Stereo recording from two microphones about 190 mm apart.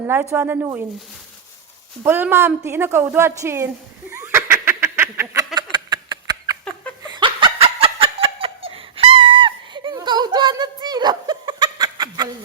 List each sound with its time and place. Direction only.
0.1 s a woman's voice: 10° right (ahead or behind)
2.0 s a woman's voice: 10° right (ahead or behind)
4.1 s a sound: 15° right (ahead or behind)
7.1 s laughter: 25° right (ahead or behind)